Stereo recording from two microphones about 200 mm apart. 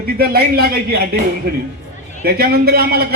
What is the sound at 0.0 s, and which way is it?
A man's voice, 50° right (ahead or behind).